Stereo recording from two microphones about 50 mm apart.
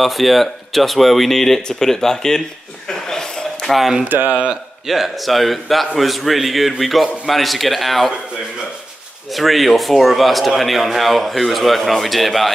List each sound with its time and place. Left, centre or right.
0.0 s a man's voice: centre
2.9 s a sound: centre
3.7 s a man's voice: centre
9.3 s a man's voice: centre